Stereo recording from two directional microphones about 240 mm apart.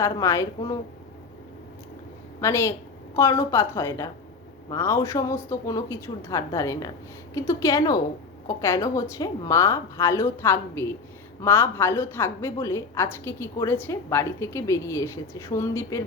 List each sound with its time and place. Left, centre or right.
0.0 s a woman's voice: centre
2.4 s a woman's voice: centre